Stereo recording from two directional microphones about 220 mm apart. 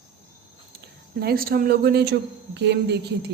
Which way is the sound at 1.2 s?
45° right (ahead or behind).